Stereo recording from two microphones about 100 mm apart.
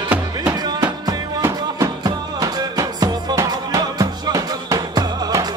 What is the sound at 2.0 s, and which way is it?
Music, 40° right (ahead or behind).